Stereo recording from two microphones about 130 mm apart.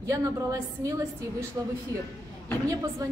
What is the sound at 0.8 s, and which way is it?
Speech, 25° right (ahead or behind).